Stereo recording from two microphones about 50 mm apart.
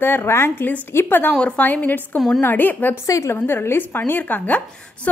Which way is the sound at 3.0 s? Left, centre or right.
Left.